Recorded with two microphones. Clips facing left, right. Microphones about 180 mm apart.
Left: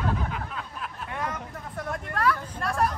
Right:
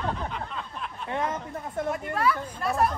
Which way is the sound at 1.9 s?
5° right (ahead or behind).